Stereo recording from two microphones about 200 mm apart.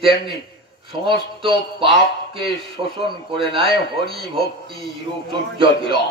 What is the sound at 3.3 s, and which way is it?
Speech, 25° right (ahead or behind).